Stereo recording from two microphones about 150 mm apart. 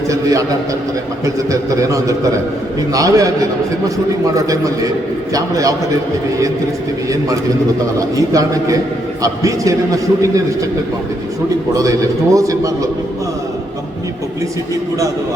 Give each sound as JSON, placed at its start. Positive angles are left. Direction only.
{"t": 0.1, "sound": "a man's voice", "side_deg": -20}
{"t": 4.4, "sound": "a man's voice", "side_deg": -20}
{"t": 8.3, "sound": "a man's voice", "side_deg": -20}
{"t": 11.7, "sound": "a man's voice", "side_deg": -20}